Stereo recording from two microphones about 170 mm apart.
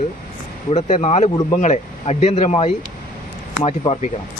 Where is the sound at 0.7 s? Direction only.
40° left (ahead or behind).